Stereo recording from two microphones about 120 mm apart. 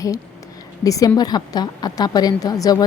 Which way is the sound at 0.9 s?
30° left (ahead or behind).